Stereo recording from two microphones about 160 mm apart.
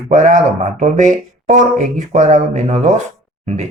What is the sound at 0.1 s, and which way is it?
Speech, 50° right (ahead or behind).